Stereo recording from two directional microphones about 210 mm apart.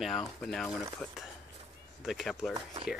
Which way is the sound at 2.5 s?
25° right (ahead or behind).